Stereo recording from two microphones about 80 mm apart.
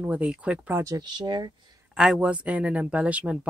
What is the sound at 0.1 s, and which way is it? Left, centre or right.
Speech, centre.